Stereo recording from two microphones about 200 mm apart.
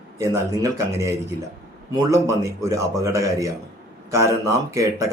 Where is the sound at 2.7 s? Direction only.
15° right (ahead or behind).